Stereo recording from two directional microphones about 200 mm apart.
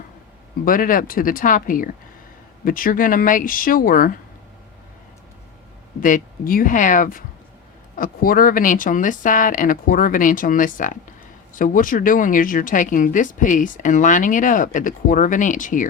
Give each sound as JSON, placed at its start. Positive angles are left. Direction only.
{"t": 0.6, "sound": "speech", "side_deg": 45}
{"t": 6.0, "sound": "speech", "side_deg": 40}